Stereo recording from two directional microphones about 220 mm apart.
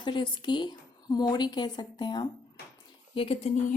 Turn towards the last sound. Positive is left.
turn(degrees=25)  # may be behind; listen again after turning